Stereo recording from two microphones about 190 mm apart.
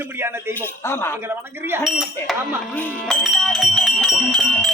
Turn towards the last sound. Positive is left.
turn(degrees=0)  # may be behind; listen again after turning